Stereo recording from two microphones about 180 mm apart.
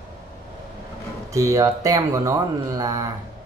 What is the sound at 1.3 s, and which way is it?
Speech, 20° right (ahead or behind).